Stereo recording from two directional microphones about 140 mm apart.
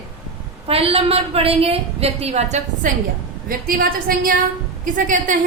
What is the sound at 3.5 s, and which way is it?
Speech, 90° right.